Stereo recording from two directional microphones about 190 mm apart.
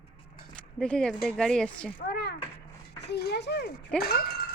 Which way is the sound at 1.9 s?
60° left (ahead or behind).